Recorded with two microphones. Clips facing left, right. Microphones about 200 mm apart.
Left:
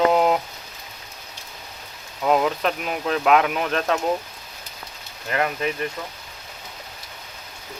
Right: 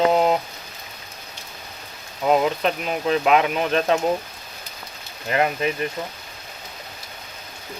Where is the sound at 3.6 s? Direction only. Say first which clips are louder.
Right 3 dB; 30° right (ahead or behind).